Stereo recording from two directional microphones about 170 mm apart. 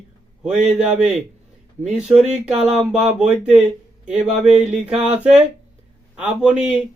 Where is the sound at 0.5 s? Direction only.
40° right (ahead or behind).